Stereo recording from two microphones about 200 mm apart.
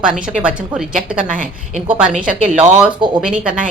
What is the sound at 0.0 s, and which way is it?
A woman's voice, 5° right (ahead or behind).